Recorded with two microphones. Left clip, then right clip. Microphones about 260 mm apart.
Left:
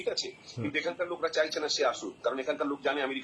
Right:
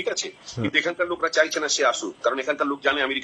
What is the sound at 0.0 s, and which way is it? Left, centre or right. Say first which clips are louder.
Speech: right 6 dB; right.